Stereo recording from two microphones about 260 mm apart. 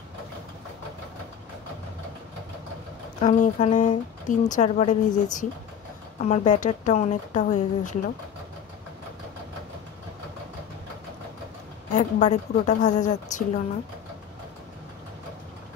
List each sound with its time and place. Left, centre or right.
3.2 s speech: left
11.9 s speech: left